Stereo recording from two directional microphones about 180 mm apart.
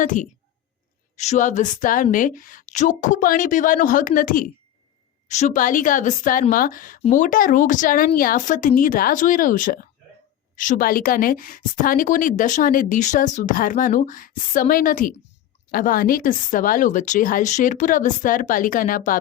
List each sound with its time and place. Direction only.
0.0 s a woman's voice: 45° left (ahead or behind)